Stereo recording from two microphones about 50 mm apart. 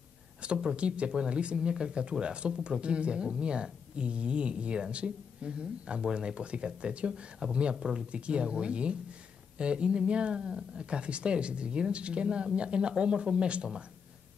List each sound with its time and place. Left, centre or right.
0.4 s speech: right
7.7 s speech: centre
8.1 s speech: right